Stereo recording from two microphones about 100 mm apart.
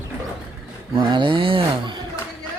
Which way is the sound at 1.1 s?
55° right (ahead or behind).